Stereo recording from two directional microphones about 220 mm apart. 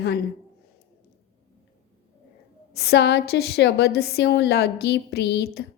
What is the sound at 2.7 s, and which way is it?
A woman's voice, 45° left (ahead or behind).